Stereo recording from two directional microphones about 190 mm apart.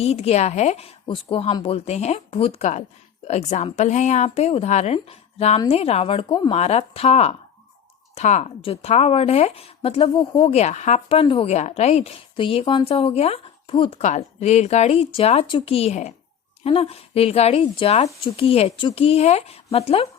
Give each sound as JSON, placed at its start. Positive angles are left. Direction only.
{"t": 0.0, "sound": "speech", "side_deg": 35}